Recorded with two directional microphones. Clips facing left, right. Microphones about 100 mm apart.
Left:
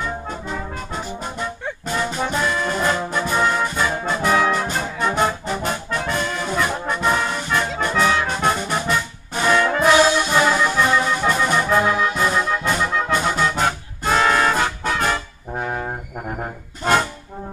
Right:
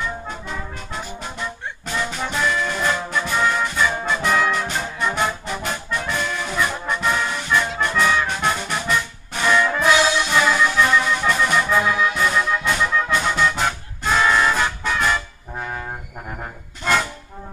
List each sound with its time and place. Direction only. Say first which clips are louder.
0.0 s brass instrument: left 2 dB; 40° left (ahead or behind)
1.9 s music: left 3 dB; 40° left (ahead or behind)
2.6 s brass instrument: left 2 dB; 35° left (ahead or behind)
7.9 s brass instrument: left 1 dB; 55° left (ahead or behind)
8.3 s brass instrument: left 2 dB; 40° left (ahead or behind)
16.8 s music: left 2 dB; 40° left (ahead or behind)